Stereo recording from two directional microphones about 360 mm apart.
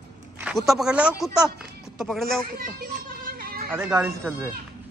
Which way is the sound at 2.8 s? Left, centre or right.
Right.